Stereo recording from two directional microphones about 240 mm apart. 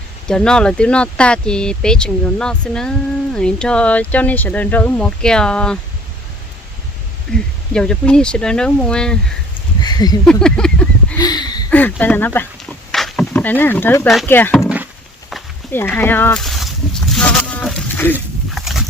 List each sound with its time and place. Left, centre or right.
0.3 s speech: centre
7.3 s speech: centre
9.8 s speech: centre
10.2 s speech: centre
11.2 s speech: centre
15.3 s a sound: centre
18.1 s dog: centre